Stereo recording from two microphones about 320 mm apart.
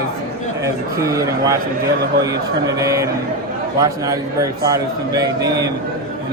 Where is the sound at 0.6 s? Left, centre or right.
Centre.